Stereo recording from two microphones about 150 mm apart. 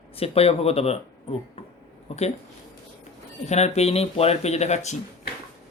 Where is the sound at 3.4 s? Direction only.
45° left (ahead or behind).